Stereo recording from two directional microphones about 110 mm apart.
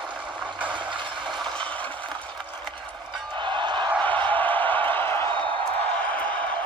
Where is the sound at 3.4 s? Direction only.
45° right (ahead or behind).